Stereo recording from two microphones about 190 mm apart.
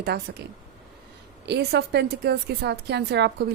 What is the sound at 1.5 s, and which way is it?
A woman's voice, 60° right (ahead or behind).